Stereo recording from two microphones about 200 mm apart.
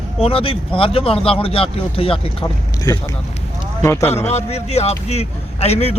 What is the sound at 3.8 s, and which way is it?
Speech, 10° left (ahead or behind).